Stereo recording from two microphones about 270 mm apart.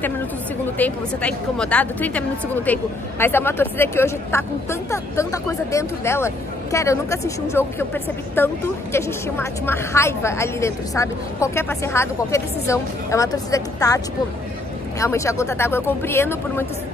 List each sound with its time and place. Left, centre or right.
0.7 s a woman's voice: centre